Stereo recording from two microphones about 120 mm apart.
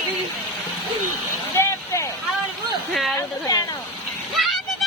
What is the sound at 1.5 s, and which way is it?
Vehicle, 25° left (ahead or behind).